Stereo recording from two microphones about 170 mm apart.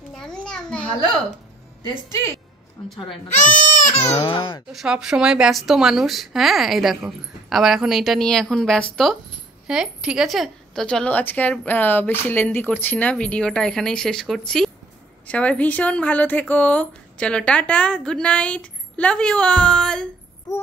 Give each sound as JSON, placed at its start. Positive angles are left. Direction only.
{"t": 0.1, "sound": "a sound", "side_deg": 5}
{"t": 3.4, "sound": "speech", "side_deg": 10}
{"t": 4.1, "sound": "speech", "side_deg": 30}
{"t": 4.7, "sound": "a woman's voice", "side_deg": -5}